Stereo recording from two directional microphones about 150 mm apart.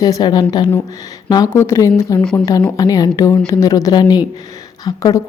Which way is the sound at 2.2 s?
5° left (ahead or behind).